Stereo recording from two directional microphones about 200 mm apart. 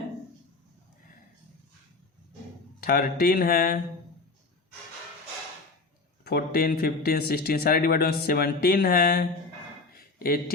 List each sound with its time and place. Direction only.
2.8 s a man's voice: 50° left (ahead or behind)
6.2 s a man's voice: 50° left (ahead or behind)